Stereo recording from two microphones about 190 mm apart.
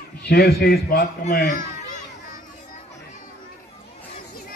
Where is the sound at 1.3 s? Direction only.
45° left (ahead or behind).